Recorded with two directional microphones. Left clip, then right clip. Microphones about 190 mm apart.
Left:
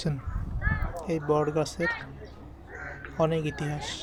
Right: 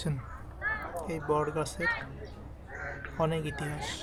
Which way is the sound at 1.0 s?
15° left (ahead or behind).